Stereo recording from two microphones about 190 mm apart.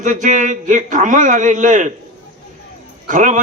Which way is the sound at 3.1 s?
40° right (ahead or behind).